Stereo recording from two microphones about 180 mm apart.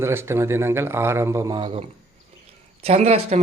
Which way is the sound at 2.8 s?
35° right (ahead or behind).